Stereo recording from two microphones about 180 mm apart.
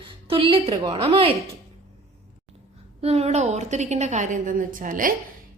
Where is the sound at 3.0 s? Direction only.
35° right (ahead or behind).